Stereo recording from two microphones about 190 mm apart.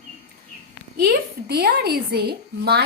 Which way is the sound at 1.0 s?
55° right (ahead or behind).